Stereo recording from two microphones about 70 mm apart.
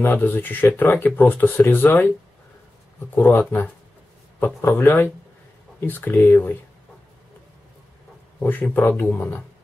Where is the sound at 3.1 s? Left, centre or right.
Left.